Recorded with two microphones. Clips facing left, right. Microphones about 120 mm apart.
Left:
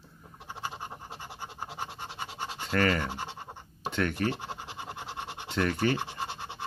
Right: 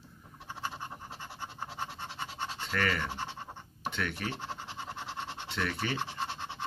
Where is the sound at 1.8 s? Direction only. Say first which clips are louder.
Even; 15° left (ahead or behind).